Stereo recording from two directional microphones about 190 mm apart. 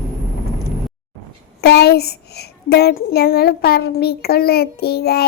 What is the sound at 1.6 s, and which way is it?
A child's voice, 60° left (ahead or behind).